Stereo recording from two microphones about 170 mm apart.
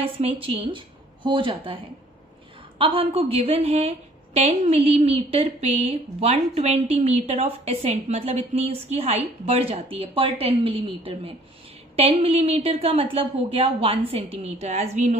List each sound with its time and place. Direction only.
0.4 s speech: 30° right (ahead or behind)
2.8 s a woman's voice: 35° right (ahead or behind)